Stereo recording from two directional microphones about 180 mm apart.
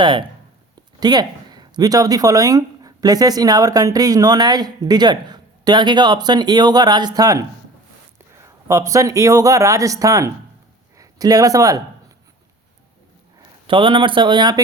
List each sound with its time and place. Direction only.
0.0 s speech: 25° right (ahead or behind)
13.7 s speech: 30° right (ahead or behind)